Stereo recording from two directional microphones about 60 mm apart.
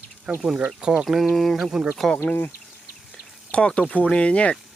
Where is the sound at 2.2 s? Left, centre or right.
Left.